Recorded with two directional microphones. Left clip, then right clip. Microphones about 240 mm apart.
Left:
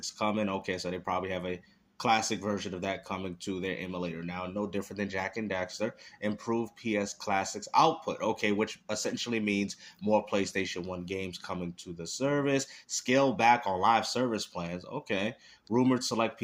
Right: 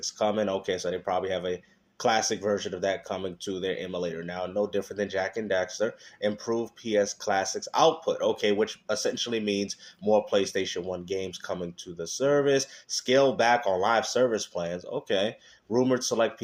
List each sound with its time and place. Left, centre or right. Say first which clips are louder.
0.2 s speech: right 5 dB; left